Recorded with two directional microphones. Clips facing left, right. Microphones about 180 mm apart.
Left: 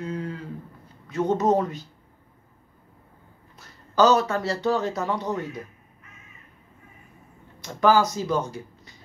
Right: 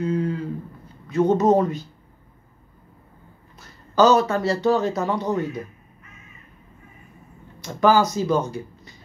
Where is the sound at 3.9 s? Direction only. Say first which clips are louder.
Right 3 dB; 20° right (ahead or behind).